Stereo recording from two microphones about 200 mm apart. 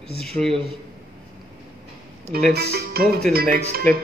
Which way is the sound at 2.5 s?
55° right (ahead or behind).